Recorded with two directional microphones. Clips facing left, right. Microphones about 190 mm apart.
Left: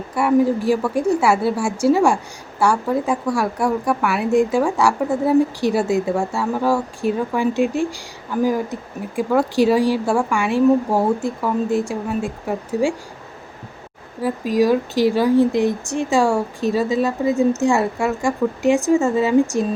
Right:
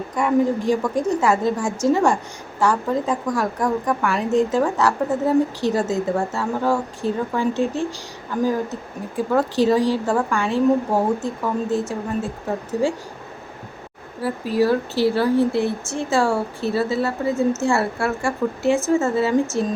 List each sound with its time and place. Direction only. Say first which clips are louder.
0.1 s speech: left 3 dB; 10° left (ahead or behind)
14.2 s speech: left 2 dB; 15° left (ahead or behind)